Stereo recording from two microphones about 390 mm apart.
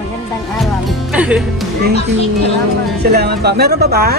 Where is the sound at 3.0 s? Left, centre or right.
Right.